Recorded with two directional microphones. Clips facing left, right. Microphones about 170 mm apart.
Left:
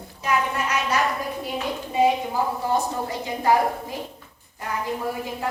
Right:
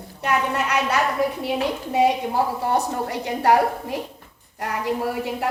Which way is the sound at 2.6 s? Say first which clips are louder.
Right 2 dB; 70° right (ahead or behind).